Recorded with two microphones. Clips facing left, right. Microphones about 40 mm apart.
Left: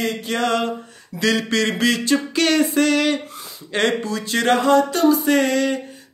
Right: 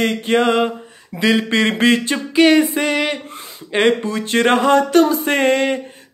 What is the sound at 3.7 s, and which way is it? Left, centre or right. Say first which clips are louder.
Speech: right 4 dB; right.